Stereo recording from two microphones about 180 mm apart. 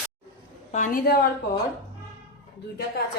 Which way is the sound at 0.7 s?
45° left (ahead or behind).